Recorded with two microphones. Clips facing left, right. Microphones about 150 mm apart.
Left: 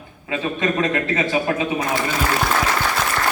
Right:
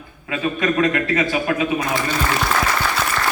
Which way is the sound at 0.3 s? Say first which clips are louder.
Right 1 dB; 25° left (ahead or behind).